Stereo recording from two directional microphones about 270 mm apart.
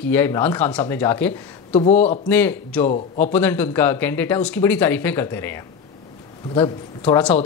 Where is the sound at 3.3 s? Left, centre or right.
Centre.